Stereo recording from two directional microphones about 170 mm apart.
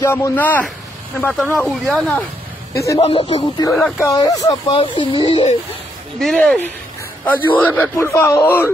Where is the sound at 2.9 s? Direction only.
35° left (ahead or behind).